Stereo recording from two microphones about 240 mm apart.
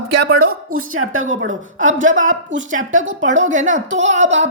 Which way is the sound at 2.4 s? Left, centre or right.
Right.